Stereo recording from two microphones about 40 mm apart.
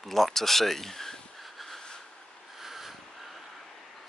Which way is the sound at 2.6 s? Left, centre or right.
Centre.